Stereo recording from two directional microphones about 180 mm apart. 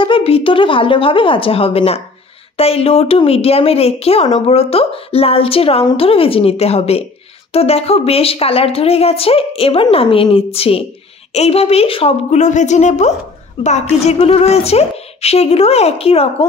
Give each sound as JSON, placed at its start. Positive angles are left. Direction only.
{"t": 0.0, "sound": "a woman's voice", "side_deg": 30}